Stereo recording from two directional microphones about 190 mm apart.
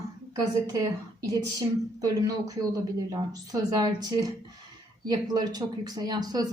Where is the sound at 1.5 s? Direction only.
20° right (ahead or behind).